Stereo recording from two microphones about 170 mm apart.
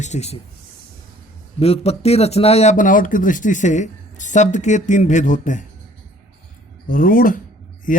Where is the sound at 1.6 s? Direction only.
35° left (ahead or behind).